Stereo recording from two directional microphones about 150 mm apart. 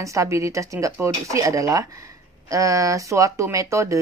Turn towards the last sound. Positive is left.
turn(degrees=-20)  # may be behind; listen again after turning